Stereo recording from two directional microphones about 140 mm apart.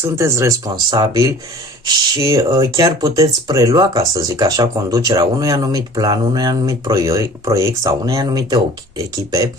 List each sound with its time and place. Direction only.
0.0 s speech: 20° right (ahead or behind)